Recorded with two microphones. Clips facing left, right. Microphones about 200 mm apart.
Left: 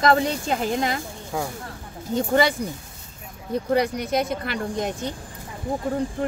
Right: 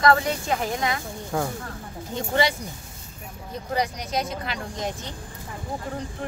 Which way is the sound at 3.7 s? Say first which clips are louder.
Left 4 dB; 60° left (ahead or behind).